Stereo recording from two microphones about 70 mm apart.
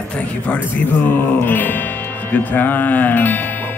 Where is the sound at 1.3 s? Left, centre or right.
Left.